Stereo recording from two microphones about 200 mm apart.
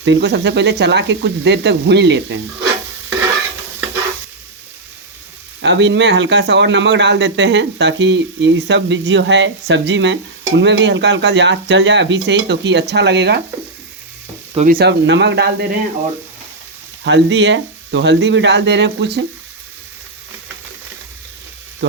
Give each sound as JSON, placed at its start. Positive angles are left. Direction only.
{"t": 0.0, "sound": "speech", "side_deg": -65}
{"t": 5.6, "sound": "speech", "side_deg": -65}
{"t": 14.5, "sound": "speech", "side_deg": -35}
{"t": 14.8, "sound": "speech", "side_deg": -60}
{"t": 17.0, "sound": "speech", "side_deg": -65}